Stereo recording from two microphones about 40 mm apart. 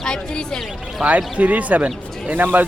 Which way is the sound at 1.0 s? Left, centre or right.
Centre.